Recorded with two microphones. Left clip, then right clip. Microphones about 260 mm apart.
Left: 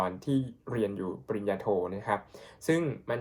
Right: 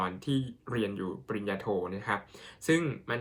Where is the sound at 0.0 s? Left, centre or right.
Right.